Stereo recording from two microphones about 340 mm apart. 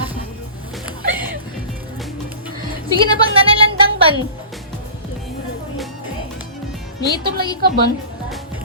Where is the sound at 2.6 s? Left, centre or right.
Right.